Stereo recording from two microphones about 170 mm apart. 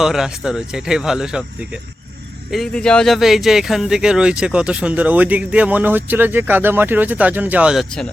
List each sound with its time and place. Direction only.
0.0 s speech: 5° right (ahead or behind)
2.5 s speech: centre (ahead or behind)